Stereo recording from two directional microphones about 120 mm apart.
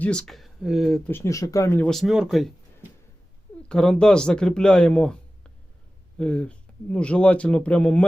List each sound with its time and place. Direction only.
0.0 s speech: 10° left (ahead or behind)
1.0 s speech: 20° left (ahead or behind)
1.9 s speech: centre (ahead or behind)
3.7 s a man's voice: 5° left (ahead or behind)